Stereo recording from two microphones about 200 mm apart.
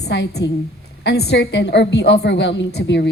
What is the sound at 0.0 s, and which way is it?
A woman's voice, 55° left (ahead or behind).